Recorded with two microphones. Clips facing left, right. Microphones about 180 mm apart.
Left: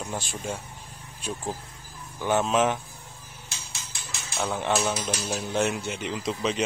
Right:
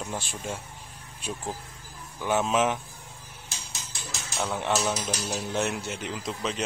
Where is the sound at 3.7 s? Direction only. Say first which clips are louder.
Right 1 dB; 45° right (ahead or behind).